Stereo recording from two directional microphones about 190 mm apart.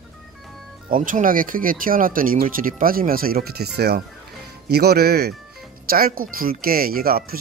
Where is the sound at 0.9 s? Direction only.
45° right (ahead or behind).